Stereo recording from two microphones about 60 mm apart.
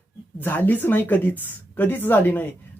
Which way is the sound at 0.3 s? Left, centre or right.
Left.